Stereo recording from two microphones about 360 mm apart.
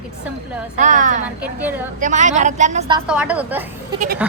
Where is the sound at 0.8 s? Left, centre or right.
Right.